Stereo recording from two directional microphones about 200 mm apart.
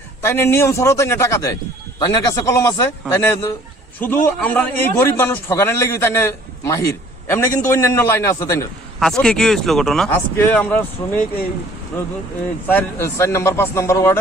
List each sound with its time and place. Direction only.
0.2 s a man's voice: 15° left (ahead or behind)
9.0 s speech: 5° left (ahead or behind)
12.6 s a man's voice: 10° left (ahead or behind)